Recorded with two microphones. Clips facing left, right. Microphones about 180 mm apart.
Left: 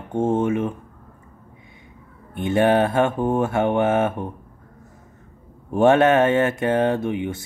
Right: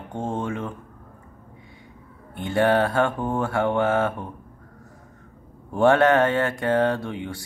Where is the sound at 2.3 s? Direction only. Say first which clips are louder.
Left 3 dB; 20° left (ahead or behind).